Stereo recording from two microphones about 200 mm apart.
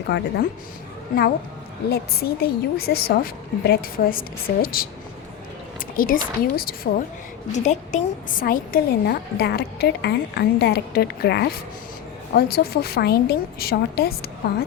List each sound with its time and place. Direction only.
0.1 s speech: 55° left (ahead or behind)
1.9 s a woman's voice: 50° left (ahead or behind)
6.0 s a woman's voice: 45° left (ahead or behind)
7.5 s a woman's voice: 35° left (ahead or behind)